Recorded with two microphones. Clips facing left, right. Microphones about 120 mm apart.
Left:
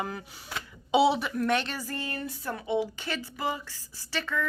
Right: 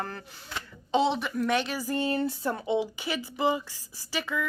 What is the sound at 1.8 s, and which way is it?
Speech, 25° right (ahead or behind).